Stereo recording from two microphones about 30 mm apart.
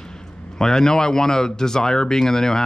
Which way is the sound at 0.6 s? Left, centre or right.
Centre.